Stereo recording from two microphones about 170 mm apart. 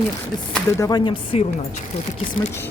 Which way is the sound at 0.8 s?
25° left (ahead or behind).